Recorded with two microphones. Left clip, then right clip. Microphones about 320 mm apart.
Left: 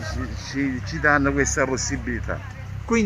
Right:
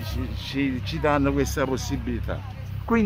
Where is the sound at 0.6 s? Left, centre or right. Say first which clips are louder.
Left 1 dB; centre.